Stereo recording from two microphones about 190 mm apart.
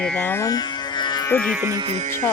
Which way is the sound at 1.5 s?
15° right (ahead or behind).